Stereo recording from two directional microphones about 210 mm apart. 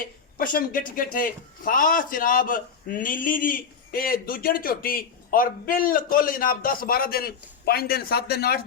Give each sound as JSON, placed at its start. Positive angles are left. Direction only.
{"t": 0.3, "sound": "speech", "side_deg": 40}